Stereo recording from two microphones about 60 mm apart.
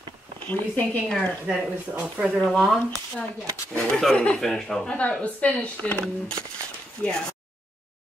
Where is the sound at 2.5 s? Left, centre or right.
Centre.